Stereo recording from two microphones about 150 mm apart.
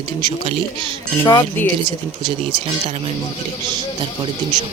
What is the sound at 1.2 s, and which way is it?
Speech, 30° left (ahead or behind).